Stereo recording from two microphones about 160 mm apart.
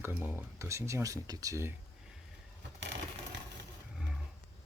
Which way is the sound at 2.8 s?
90° right.